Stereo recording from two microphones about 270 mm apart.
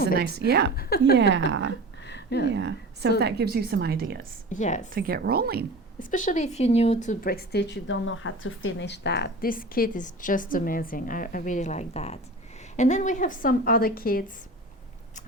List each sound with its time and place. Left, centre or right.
0.2 s a woman's voice: right
0.8 s speech: left
1.1 s a woman's voice: right
2.0 s a sound: left
2.5 s a woman's voice: right
4.4 s a woman's voice: left
4.9 s a woman's voice: right
6.0 s speech: left